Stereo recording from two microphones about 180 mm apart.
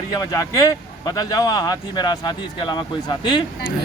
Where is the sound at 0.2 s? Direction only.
20° left (ahead or behind).